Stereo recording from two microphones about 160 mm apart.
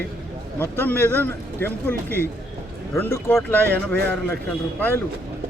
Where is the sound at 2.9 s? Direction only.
15° left (ahead or behind).